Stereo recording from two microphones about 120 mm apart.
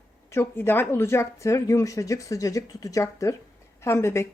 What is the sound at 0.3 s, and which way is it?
A woman's voice, 20° left (ahead or behind).